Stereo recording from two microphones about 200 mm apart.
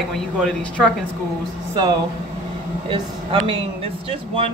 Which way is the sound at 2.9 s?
25° right (ahead or behind).